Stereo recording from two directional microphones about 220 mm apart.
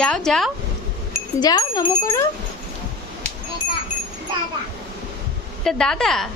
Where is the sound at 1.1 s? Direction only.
15° left (ahead or behind).